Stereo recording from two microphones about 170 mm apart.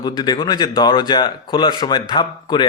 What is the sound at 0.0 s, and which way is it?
Speech, 25° left (ahead or behind).